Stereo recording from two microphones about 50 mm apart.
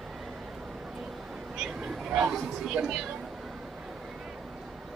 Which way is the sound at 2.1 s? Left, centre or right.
Centre.